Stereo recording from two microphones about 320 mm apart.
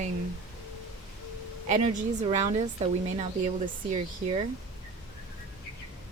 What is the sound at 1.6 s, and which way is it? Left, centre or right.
Speech, right.